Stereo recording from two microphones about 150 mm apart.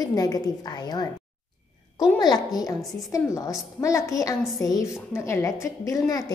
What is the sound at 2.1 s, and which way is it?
A woman's voice, 25° left (ahead or behind).